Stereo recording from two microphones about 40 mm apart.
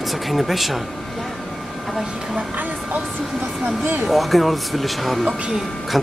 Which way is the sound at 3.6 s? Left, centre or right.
Right.